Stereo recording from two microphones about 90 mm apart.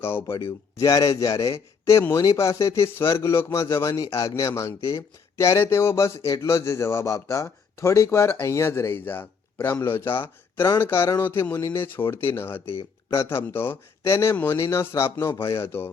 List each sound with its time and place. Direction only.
0.0 s a man's voice: 25° left (ahead or behind)
0.8 s speech: 40° left (ahead or behind)
1.5 s a man's voice: 30° left (ahead or behind)